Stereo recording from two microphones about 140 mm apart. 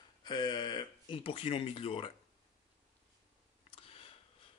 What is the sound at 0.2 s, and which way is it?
Speech, 30° left (ahead or behind).